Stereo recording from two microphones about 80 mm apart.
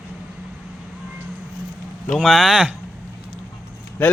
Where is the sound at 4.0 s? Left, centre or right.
Centre.